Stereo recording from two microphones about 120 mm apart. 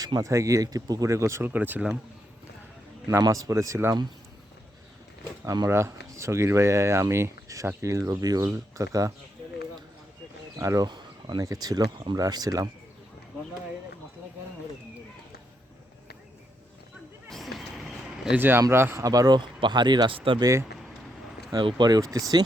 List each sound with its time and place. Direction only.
0.0 s speech: 30° right (ahead or behind); by 2.0 s 10° right (ahead or behind)
3.1 s speech: 25° right (ahead or behind)
5.5 s speech: 25° right (ahead or behind)
10.6 s speech: 25° right (ahead or behind)
17.2 s vehicle: centre (ahead or behind)
18.3 s speech: 15° right (ahead or behind); by 20.4 s 45° right (ahead or behind)
20.4 s speech: 25° right (ahead or behind)
21.8 s speech: 35° right (ahead or behind)